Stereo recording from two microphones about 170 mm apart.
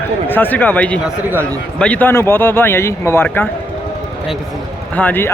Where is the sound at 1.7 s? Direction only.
5° left (ahead or behind).